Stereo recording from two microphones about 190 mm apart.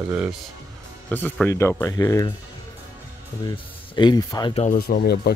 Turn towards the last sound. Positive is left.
turn(degrees=50)  # may be behind; listen again after turning